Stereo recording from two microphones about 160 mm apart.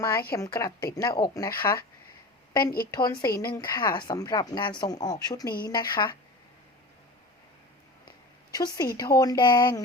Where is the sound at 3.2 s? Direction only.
70° left (ahead or behind).